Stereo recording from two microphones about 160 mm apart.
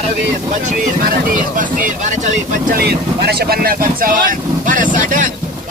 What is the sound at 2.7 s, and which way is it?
Speech, 85° right.